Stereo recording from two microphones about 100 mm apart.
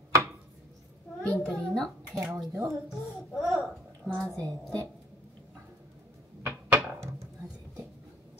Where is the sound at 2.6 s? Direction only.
30° right (ahead or behind).